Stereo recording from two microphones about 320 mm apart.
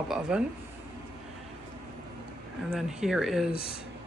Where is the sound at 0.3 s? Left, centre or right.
Centre.